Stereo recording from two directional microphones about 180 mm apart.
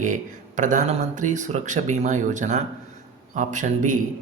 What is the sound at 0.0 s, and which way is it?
A woman's voice, 45° right (ahead or behind).